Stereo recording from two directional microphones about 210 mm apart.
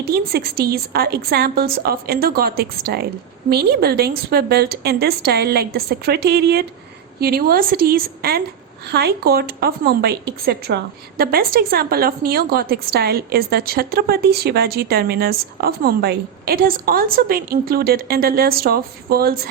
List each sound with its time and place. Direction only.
0.0 s a woman's voice: 50° right (ahead or behind)